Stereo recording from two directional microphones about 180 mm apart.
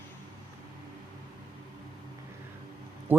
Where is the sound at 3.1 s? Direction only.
10° right (ahead or behind).